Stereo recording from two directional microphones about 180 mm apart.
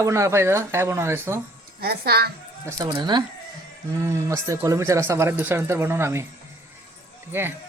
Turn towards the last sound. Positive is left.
turn(degrees=-10)  # may be behind; listen again after turning